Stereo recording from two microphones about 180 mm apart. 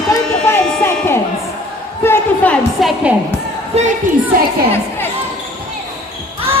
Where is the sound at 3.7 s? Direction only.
35° right (ahead or behind).